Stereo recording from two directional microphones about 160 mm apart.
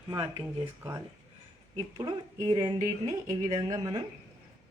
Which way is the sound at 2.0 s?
25° right (ahead or behind).